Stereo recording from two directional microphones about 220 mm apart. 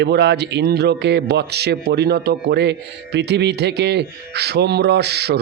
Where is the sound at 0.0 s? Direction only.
50° right (ahead or behind).